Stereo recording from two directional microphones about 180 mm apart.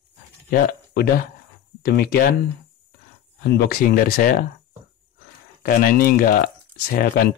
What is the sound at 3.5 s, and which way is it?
Speech, 60° left (ahead or behind).